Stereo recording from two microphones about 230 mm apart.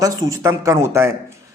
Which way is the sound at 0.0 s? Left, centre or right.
Centre.